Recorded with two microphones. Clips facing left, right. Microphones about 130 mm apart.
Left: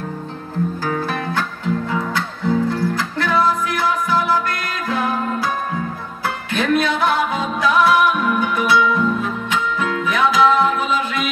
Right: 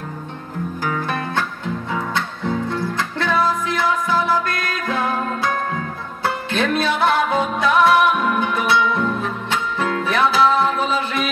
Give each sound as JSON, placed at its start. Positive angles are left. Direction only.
{"t": 1.9, "sound": "music", "side_deg": -25}